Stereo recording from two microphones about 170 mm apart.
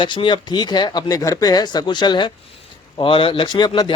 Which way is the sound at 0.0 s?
25° left (ahead or behind).